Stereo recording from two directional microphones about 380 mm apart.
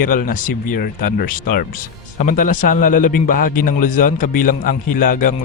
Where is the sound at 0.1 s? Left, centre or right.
Left.